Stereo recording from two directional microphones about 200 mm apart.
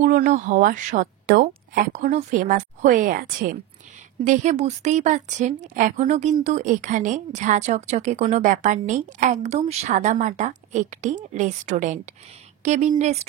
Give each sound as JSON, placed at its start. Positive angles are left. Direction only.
{"t": 0.0, "sound": "a woman's voice", "side_deg": -40}